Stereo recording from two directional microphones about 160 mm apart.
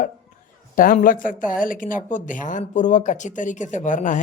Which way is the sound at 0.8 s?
60° left (ahead or behind).